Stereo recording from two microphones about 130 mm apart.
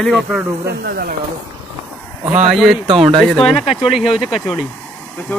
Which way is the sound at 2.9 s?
45° right (ahead or behind).